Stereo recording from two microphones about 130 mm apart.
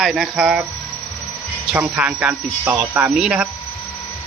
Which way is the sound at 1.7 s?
10° right (ahead or behind).